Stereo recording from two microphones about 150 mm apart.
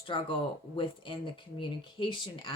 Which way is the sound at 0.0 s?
35° left (ahead or behind).